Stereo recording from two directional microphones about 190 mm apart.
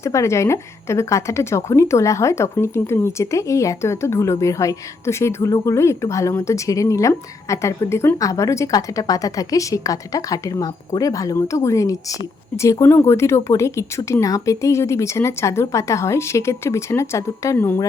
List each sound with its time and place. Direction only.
0.0 s speech: 15° left (ahead or behind)